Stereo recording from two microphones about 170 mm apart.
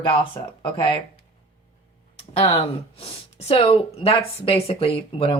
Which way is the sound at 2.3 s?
35° left (ahead or behind).